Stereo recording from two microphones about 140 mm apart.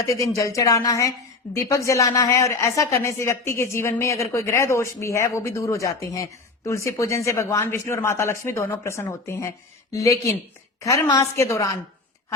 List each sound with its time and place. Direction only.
0.0 s speech: 20° left (ahead or behind)